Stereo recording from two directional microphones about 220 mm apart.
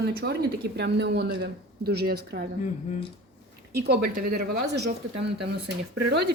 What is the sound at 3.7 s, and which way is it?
Speech, 45° right (ahead or behind).